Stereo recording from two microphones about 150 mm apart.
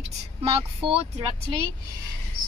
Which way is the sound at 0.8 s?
35° right (ahead or behind).